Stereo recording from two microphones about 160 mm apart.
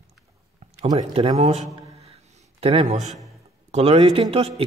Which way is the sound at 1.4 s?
45° right (ahead or behind).